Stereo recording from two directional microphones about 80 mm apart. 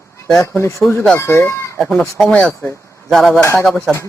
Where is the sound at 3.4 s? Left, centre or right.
Left.